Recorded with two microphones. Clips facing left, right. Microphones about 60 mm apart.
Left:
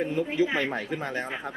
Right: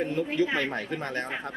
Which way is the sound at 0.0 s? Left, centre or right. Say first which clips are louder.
Left 1 dB; centre.